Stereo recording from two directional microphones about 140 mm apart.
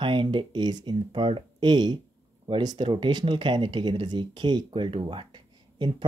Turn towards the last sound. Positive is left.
turn(degrees=-35)  # may be behind; listen again after turning